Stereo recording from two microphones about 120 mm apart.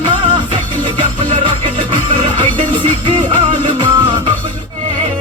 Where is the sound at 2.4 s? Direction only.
40° right (ahead or behind).